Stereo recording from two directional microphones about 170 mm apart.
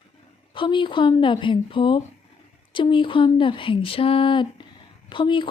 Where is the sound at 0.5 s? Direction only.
30° left (ahead or behind).